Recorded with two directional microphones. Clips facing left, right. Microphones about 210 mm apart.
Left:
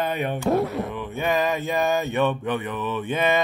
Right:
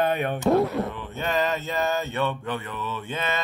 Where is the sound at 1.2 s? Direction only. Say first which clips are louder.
Left 2 dB; 10° left (ahead or behind).